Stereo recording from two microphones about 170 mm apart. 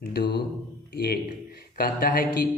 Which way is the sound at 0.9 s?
65° left (ahead or behind).